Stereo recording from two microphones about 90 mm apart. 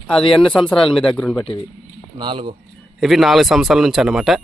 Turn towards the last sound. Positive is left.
turn(degrees=-5)  # may be behind; listen again after turning